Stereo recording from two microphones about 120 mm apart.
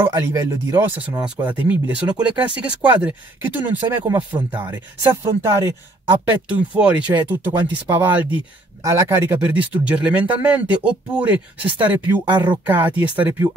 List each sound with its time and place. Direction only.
0.0 s speech: 25° right (ahead or behind); by 11.3 s 10° right (ahead or behind)
12.3 s speech: 40° right (ahead or behind)
12.6 s speech: 15° right (ahead or behind)